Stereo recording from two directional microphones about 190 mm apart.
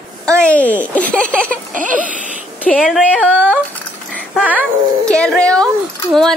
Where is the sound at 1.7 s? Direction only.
45° right (ahead or behind).